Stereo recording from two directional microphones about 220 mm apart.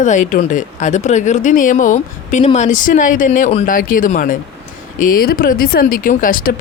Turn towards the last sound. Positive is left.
turn(degrees=40)  # may be behind; listen again after turning